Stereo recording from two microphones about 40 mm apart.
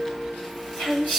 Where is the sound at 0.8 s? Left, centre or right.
Centre.